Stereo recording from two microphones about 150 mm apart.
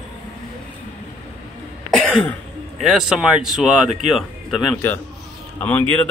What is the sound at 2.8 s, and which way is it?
Speech, centre (ahead or behind).